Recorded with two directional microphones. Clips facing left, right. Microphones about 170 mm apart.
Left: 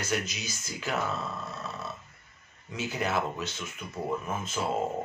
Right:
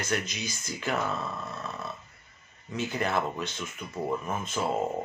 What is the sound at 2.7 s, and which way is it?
Speech, 10° left (ahead or behind).